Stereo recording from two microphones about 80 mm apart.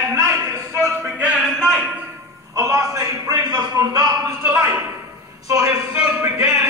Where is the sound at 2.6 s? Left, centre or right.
Right.